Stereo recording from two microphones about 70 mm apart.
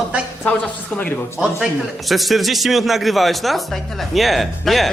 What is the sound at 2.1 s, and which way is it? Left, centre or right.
Speech, centre.